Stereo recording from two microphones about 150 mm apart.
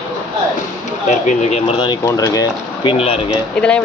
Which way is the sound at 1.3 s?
50° left (ahead or behind).